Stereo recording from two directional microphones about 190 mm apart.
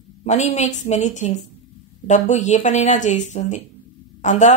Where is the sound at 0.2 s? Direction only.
40° left (ahead or behind).